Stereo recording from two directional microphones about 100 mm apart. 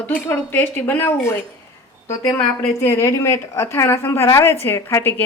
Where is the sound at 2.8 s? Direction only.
25° left (ahead or behind).